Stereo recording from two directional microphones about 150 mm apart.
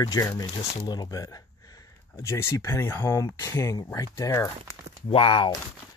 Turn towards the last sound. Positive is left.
turn(degrees=35)  # may be behind; listen again after turning